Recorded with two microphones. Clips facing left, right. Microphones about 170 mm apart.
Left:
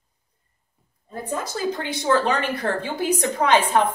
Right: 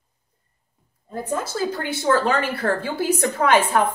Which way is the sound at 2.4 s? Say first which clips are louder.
Right 2 dB; 20° left (ahead or behind).